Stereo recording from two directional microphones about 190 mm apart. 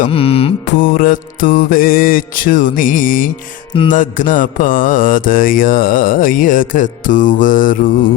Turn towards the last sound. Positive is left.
turn(degrees=45)  # may be behind; listen again after turning